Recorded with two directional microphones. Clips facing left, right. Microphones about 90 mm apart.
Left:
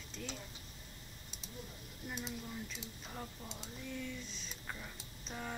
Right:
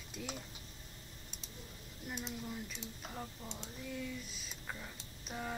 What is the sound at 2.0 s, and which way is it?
Speech, centre (ahead or behind).